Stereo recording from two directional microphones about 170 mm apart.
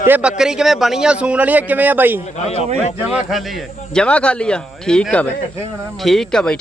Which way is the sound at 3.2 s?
Centre (ahead or behind).